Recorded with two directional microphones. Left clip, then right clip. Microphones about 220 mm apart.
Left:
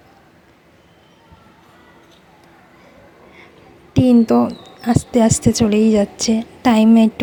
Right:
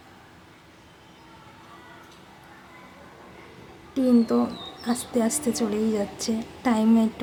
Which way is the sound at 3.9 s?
35° left (ahead or behind).